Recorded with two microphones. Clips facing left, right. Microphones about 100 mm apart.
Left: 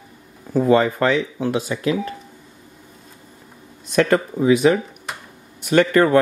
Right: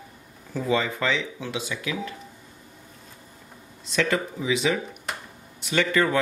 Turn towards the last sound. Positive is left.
turn(degrees=50)  # may be behind; listen again after turning